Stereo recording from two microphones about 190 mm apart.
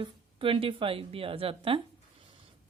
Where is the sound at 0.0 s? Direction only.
30° right (ahead or behind).